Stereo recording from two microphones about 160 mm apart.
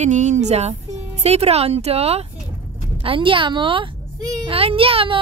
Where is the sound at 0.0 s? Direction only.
45° right (ahead or behind).